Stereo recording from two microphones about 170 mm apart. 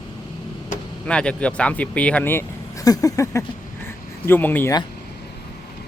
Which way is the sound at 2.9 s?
20° left (ahead or behind).